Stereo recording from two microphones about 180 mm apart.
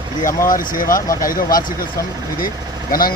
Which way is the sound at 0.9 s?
50° left (ahead or behind).